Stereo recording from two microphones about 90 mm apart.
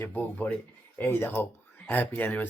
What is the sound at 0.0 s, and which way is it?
Speech, 15° left (ahead or behind).